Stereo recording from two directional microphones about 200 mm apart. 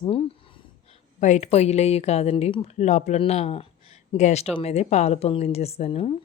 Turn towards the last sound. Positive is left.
turn(degrees=30)  # may be behind; listen again after turning